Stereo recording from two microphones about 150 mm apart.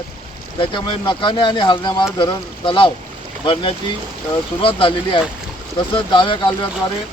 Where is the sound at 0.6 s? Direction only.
30° left (ahead or behind).